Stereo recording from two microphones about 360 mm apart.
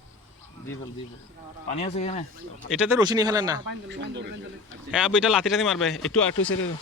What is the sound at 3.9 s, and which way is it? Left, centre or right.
Speech, right.